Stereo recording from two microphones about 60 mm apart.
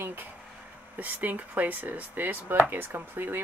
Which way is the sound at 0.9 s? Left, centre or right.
Right.